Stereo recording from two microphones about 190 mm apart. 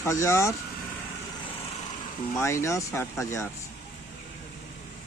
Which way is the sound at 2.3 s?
15° left (ahead or behind).